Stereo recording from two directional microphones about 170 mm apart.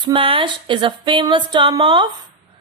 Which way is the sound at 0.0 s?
30° right (ahead or behind).